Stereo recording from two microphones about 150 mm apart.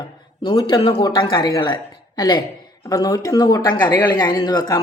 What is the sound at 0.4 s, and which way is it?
Speech, 30° left (ahead or behind).